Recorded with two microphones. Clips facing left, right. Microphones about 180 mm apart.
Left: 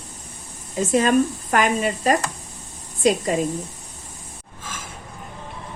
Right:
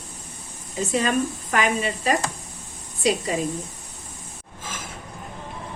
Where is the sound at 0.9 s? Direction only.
45° left (ahead or behind).